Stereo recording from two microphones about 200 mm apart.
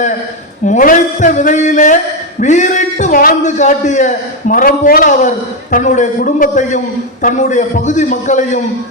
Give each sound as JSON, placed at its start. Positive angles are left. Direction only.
{"t": 0.6, "sound": "a man's voice", "side_deg": 40}